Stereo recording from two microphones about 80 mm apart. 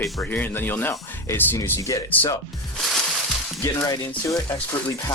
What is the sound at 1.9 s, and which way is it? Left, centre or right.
Speech, left.